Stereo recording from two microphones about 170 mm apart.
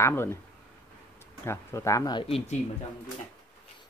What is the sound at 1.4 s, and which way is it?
Speech, 15° left (ahead or behind).